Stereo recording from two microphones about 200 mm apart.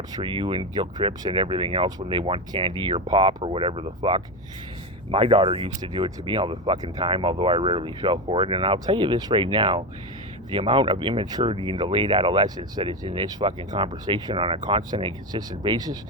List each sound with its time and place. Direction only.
0.1 s speech: 25° right (ahead or behind)